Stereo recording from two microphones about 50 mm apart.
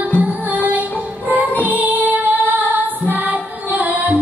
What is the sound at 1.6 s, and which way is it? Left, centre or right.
Music, right.